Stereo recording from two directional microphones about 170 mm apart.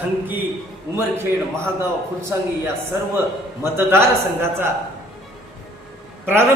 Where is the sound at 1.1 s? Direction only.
15° right (ahead or behind).